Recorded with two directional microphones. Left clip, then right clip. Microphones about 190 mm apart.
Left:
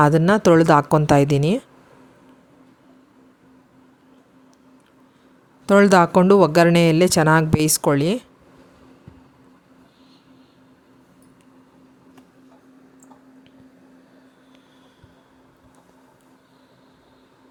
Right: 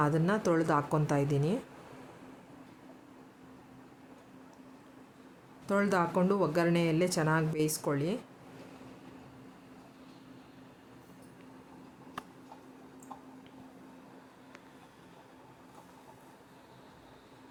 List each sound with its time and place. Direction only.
0.0 s speech: 45° left (ahead or behind)
5.6 s speech: 50° left (ahead or behind)